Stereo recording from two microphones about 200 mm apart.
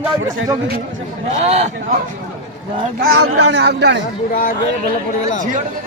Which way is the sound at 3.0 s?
50° right (ahead or behind).